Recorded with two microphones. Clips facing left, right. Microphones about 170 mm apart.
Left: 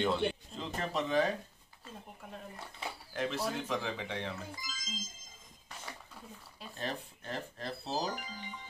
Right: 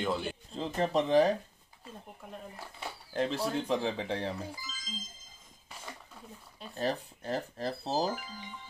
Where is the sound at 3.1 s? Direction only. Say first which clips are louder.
Right 4 dB; 30° right (ahead or behind).